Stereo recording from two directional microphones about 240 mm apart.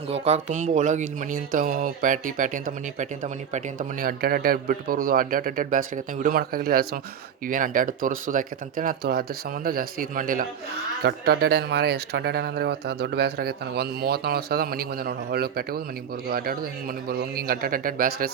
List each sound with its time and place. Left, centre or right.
0.1 s speech: right
17.1 s speech: right